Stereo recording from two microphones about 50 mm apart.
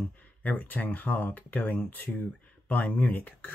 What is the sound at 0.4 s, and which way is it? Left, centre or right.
Speech, left.